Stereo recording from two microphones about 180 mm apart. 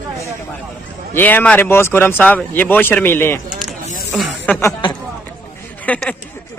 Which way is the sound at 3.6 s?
5° left (ahead or behind).